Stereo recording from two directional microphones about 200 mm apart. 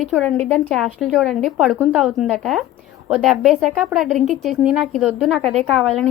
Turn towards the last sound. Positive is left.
turn(degrees=0)  # may be behind; listen again after turning